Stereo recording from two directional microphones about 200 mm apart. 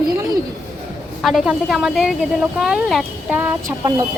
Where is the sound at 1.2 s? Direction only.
Centre (ahead or behind).